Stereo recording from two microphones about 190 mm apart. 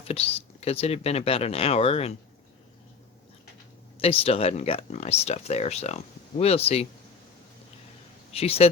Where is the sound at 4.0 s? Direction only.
30° left (ahead or behind).